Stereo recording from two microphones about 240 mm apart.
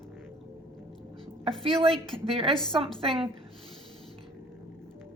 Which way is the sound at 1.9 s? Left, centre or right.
Centre.